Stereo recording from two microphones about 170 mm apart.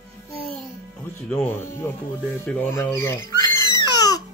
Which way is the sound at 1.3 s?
10° left (ahead or behind).